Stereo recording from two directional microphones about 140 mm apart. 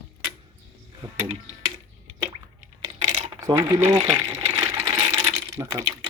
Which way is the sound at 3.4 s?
20° right (ahead or behind).